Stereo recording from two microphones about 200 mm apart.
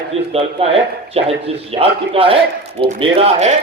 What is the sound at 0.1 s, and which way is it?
Speech, 30° right (ahead or behind).